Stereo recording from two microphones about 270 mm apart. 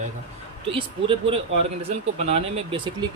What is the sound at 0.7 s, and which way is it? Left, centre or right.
Speech, centre.